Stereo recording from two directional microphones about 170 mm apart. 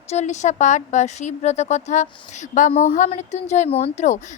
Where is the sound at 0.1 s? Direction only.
45° left (ahead or behind).